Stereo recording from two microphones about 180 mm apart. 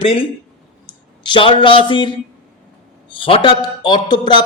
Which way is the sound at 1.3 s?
25° left (ahead or behind).